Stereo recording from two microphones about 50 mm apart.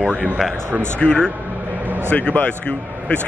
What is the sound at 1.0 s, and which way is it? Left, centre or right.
Speech, centre.